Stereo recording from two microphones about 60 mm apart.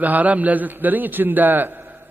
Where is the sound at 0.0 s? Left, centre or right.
Right.